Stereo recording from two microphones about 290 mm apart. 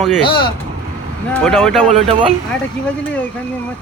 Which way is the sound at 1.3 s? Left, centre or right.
Centre.